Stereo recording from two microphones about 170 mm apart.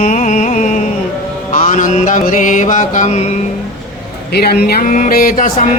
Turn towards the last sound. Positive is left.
turn(degrees=50)  # may be behind; listen again after turning